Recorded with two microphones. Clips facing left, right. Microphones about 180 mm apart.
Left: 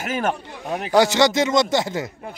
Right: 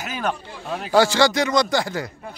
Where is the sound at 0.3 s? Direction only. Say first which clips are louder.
Left 2 dB; 20° left (ahead or behind).